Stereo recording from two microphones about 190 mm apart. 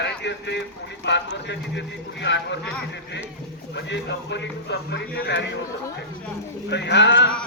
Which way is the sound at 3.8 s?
65° left (ahead or behind).